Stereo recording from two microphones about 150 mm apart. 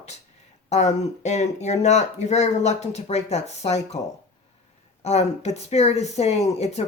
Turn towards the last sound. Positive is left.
turn(degrees=45)  # may be behind; listen again after turning